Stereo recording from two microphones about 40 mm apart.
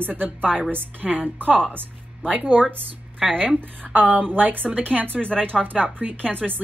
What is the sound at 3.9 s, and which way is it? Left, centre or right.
A woman's voice, right.